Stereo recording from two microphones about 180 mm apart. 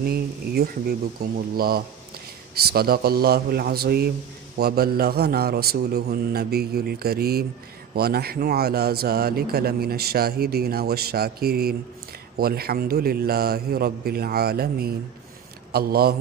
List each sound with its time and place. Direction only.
0.0 s a man's voice: 60° right (ahead or behind)
2.5 s a man's voice: 60° right (ahead or behind)